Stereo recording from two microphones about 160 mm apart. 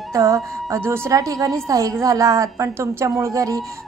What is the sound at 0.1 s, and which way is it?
A woman's voice, 20° right (ahead or behind).